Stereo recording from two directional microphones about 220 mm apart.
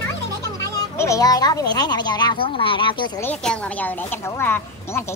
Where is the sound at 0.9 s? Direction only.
15° left (ahead or behind).